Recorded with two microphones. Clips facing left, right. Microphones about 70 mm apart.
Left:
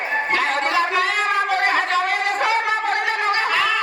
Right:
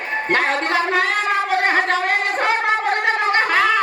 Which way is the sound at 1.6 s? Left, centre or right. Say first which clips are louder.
Right 1 dB; right.